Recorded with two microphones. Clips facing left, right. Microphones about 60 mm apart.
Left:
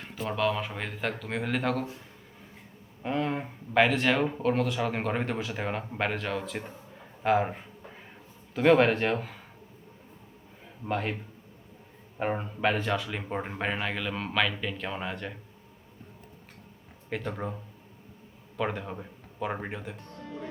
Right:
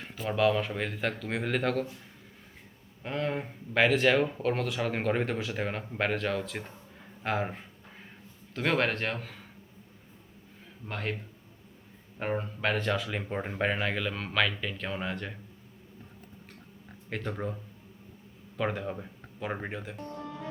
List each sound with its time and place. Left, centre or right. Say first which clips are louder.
0.0 s speech: right 2 dB; centre
3.0 s speech: left 2 dB; centre
10.8 s speech: left 4 dB; centre
12.2 s speech: left 3 dB; centre
17.1 s speech: left 1 dB; centre